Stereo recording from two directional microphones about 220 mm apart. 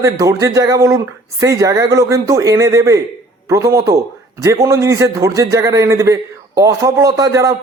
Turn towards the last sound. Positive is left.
turn(degrees=-15)  # may be behind; listen again after turning